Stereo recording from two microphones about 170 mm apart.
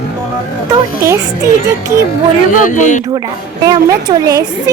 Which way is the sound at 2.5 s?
50° left (ahead or behind).